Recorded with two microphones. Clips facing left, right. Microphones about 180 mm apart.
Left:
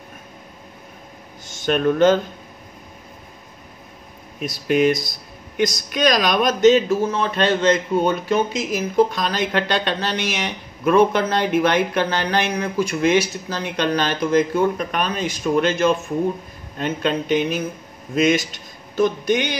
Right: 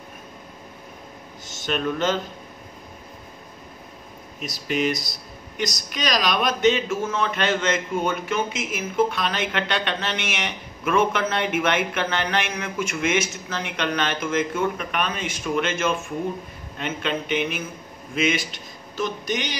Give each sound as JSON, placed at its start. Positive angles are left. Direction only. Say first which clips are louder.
{"t": 1.5, "sound": "speech", "louder": "left 7 dB", "side_deg": 50}
{"t": 4.4, "sound": "a man's voice", "louder": "left 7 dB", "side_deg": 50}